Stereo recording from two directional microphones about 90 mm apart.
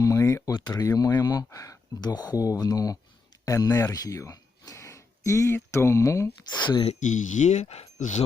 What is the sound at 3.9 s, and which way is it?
Speech, 40° left (ahead or behind).